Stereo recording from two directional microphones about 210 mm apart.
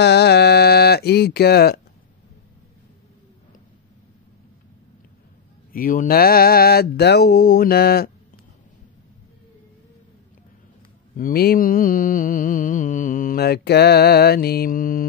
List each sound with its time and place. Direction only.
0.0 s a sound: 50° left (ahead or behind)
5.7 s mantra: 40° left (ahead or behind)
11.1 s mantra: 45° left (ahead or behind)